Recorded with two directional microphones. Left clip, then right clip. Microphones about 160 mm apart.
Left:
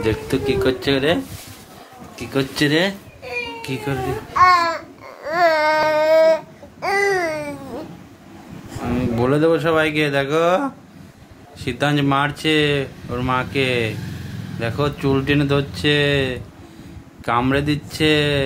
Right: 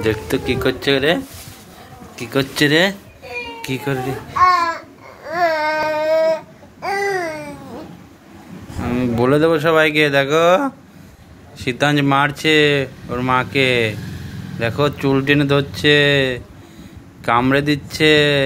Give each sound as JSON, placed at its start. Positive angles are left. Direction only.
{"t": 0.0, "sound": "speech", "side_deg": -10}
{"t": 4.3, "sound": "babbling", "side_deg": 15}
{"t": 8.8, "sound": "speech", "side_deg": -25}